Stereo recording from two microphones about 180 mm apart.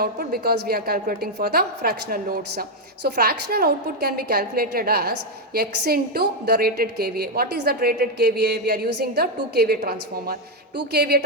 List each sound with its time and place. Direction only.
0.0 s a woman's voice: 55° right (ahead or behind)